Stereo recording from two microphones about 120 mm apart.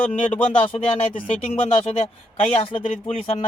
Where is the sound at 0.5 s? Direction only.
50° left (ahead or behind).